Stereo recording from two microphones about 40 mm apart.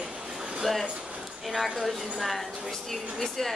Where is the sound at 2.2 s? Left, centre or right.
Centre.